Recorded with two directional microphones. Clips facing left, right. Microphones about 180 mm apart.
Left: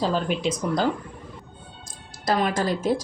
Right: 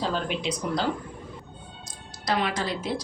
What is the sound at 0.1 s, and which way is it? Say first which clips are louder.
Speech: left 4 dB; 45° left (ahead or behind).